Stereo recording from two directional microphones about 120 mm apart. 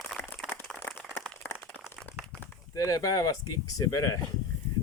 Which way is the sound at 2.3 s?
10° left (ahead or behind).